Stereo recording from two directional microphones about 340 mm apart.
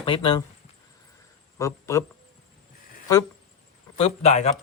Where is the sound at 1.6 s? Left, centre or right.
Centre.